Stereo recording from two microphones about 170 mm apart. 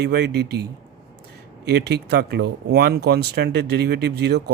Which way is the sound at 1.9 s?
75° right (ahead or behind).